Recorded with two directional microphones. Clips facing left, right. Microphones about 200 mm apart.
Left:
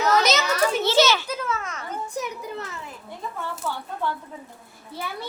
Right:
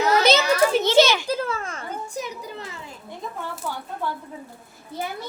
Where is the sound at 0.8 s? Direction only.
15° right (ahead or behind).